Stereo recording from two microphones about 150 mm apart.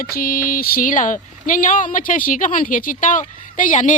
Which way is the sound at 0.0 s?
75° left (ahead or behind).